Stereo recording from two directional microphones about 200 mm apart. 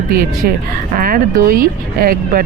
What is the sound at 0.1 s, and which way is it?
Speech, 45° right (ahead or behind).